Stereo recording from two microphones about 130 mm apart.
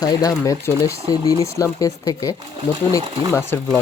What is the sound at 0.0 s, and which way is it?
Speech, 30° left (ahead or behind).